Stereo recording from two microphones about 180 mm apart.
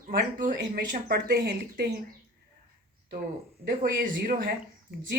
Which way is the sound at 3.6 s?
55° right (ahead or behind).